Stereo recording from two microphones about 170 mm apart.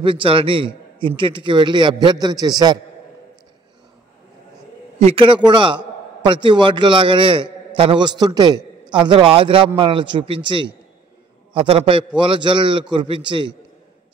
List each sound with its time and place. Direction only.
0.0 s a man's voice: 30° right (ahead or behind)
4.9 s a man's voice: 35° right (ahead or behind)